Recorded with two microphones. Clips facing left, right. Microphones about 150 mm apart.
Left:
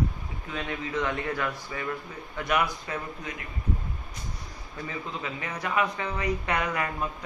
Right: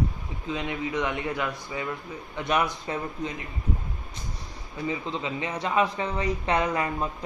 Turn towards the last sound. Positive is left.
turn(degrees=-25)  # may be behind; listen again after turning